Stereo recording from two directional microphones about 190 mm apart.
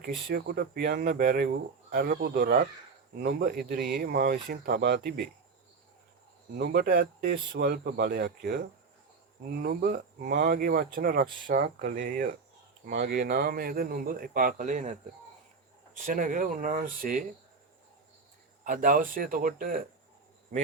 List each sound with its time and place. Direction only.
0.3 s speech: 55° right (ahead or behind)
6.6 s speech: 55° right (ahead or behind); by 14.9 s 40° right (ahead or behind)
16.0 s speech: 45° right (ahead or behind)
18.6 s speech: 45° right (ahead or behind)